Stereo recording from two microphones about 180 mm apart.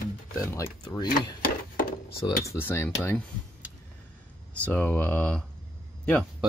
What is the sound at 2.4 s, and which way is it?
Cutlery, 15° left (ahead or behind).